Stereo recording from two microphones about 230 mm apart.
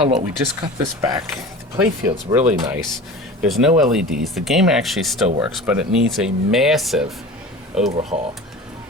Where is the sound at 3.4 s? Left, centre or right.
Centre.